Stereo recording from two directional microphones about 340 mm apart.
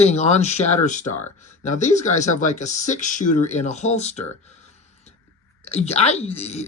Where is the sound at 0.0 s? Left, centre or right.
Centre.